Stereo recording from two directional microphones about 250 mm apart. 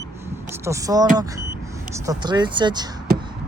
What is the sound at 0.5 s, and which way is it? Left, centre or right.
Speech, centre.